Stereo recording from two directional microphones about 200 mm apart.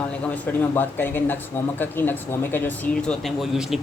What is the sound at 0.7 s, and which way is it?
Speech, 10° left (ahead or behind).